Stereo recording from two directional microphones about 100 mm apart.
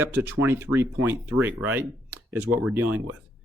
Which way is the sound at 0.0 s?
20° right (ahead or behind).